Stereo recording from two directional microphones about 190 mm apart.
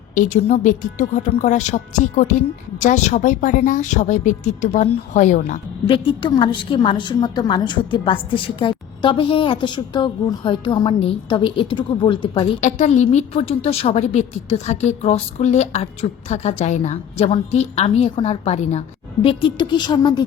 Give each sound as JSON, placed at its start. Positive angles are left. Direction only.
{"t": 0.1, "sound": "a woman's voice", "side_deg": 40}
{"t": 5.9, "sound": "a woman's voice", "side_deg": 25}
{"t": 12.6, "sound": "a woman's voice", "side_deg": 35}